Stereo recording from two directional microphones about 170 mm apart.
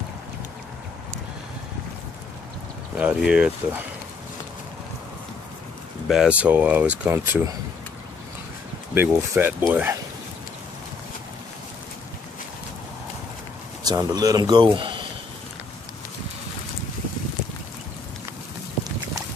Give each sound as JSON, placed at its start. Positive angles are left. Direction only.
{"t": 3.0, "sound": "speech", "side_deg": -5}
{"t": 6.0, "sound": "speech", "side_deg": -5}
{"t": 8.9, "sound": "speech", "side_deg": -15}
{"t": 13.8, "sound": "speech", "side_deg": -20}